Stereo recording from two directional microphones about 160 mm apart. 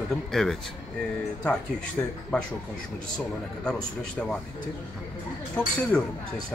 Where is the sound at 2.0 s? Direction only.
10° left (ahead or behind).